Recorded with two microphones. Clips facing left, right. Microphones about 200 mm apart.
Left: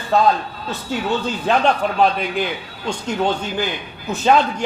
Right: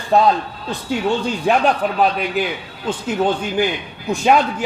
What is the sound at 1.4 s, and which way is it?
A man's voice, 5° right (ahead or behind).